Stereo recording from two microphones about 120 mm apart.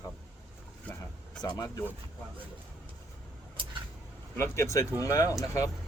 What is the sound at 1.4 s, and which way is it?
Speech, 35° left (ahead or behind).